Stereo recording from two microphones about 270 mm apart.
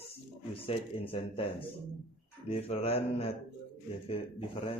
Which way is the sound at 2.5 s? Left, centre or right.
Left.